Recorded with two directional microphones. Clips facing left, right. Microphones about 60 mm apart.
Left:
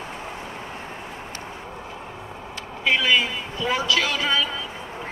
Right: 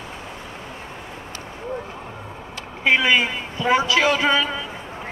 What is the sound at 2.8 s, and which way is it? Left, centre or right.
Speech, right.